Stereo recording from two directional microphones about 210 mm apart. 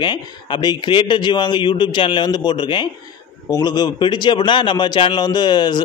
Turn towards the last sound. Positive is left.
turn(degrees=20)  # may be behind; listen again after turning